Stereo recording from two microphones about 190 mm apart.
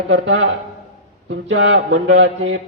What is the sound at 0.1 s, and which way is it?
A man's voice, 70° right (ahead or behind).